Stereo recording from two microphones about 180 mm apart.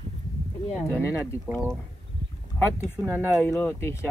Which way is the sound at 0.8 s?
15° left (ahead or behind).